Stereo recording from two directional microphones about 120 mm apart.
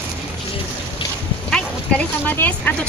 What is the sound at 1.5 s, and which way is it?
Dog, 10° left (ahead or behind).